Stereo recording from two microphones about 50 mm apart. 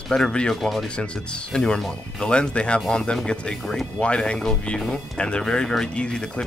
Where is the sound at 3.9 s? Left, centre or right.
Centre.